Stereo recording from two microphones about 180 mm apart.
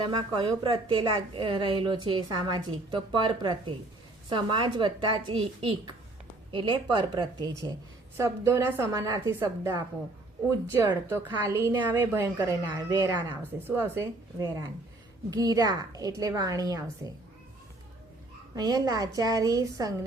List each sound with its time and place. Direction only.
0.1 s a woman's voice: 25° right (ahead or behind)
18.5 s a woman's voice: 20° right (ahead or behind)